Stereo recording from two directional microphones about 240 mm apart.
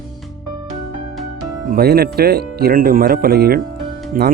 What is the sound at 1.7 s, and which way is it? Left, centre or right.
Speech, right.